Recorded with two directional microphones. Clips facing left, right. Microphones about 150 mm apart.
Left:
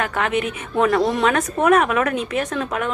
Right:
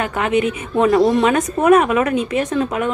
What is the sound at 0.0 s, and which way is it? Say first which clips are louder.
Speech: right 4 dB; centre (ahead or behind).